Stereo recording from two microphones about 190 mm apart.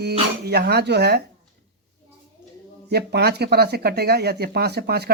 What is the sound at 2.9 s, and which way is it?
A woman's voice, 60° right (ahead or behind).